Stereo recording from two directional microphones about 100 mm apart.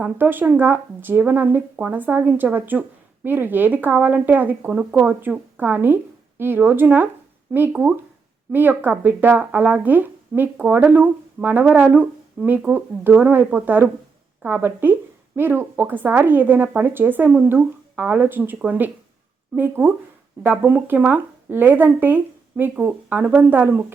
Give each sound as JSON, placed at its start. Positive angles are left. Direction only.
{"t": 0.0, "sound": "speech", "side_deg": -20}